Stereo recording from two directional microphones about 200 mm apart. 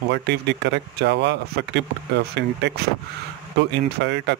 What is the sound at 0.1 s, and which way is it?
Speech, 60° right (ahead or behind).